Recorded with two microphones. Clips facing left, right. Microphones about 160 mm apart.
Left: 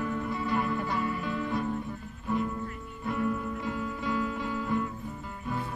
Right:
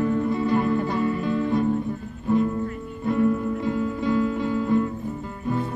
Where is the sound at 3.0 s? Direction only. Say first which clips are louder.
Right 9 dB; 35° right (ahead or behind).